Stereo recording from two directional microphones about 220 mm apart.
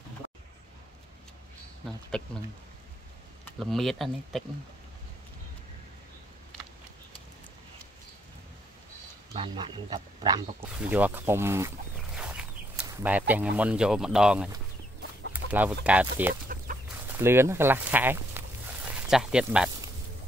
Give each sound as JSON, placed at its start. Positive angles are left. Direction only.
{"t": 1.9, "sound": "speech", "side_deg": 5}
{"t": 3.5, "sound": "speech", "side_deg": 0}
{"t": 9.3, "sound": "speech", "side_deg": -25}
{"t": 10.7, "sound": "a sound", "side_deg": -5}
{"t": 13.3, "sound": "speech", "side_deg": -5}
{"t": 16.9, "sound": "a sound", "side_deg": -10}